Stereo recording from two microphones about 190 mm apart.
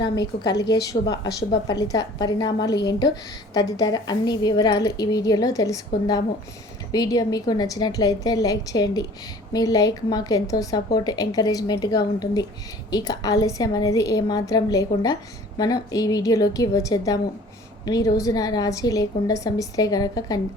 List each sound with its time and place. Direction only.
0.4 s speech: 20° left (ahead or behind)